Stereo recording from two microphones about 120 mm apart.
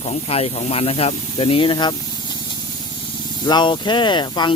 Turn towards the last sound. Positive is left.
turn(degrees=40)  # may be behind; listen again after turning